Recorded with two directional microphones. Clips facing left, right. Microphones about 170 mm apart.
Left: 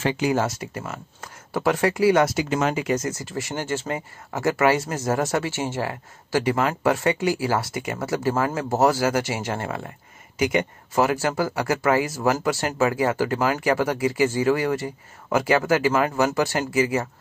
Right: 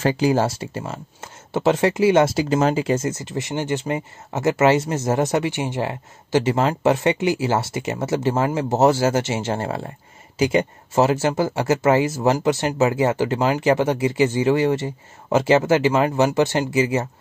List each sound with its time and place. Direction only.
0.0 s speech: 35° right (ahead or behind)